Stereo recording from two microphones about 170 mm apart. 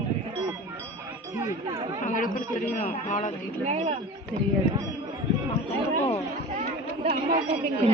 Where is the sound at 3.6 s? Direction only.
40° right (ahead or behind).